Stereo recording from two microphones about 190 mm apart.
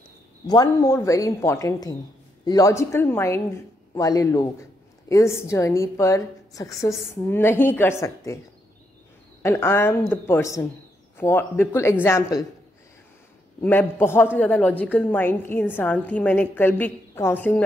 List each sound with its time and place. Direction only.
0.5 s a woman's voice: 20° left (ahead or behind)
9.4 s a woman's voice: 15° left (ahead or behind)
13.6 s a woman's voice: 10° left (ahead or behind)